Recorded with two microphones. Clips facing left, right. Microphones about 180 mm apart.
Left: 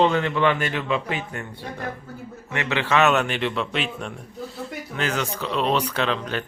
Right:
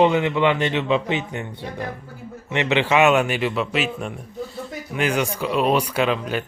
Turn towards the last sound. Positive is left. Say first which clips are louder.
# right 3 dB
turn(degrees=-10)  # may be behind; listen again after turning